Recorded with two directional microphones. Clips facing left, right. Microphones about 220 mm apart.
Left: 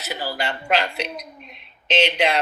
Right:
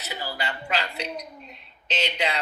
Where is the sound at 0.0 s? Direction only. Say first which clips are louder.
Left 5 dB; 80° left.